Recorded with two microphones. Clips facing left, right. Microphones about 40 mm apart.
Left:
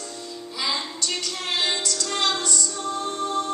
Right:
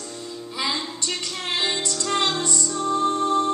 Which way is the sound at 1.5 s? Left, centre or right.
Right.